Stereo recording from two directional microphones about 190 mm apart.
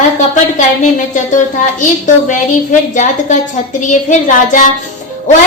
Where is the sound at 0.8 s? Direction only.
40° left (ahead or behind).